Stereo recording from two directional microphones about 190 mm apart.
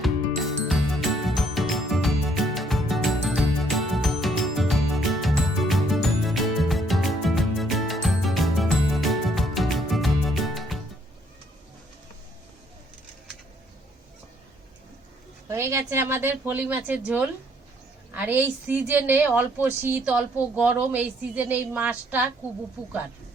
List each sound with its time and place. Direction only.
0.0 s music: centre (ahead or behind)
15.4 s a woman's voice: 15° right (ahead or behind)
18.1 s a woman's voice: 10° right (ahead or behind)